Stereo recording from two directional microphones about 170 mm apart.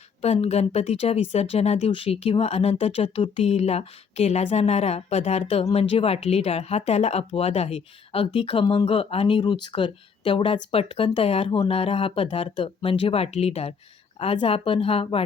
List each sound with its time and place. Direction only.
0.2 s speech: 40° left (ahead or behind)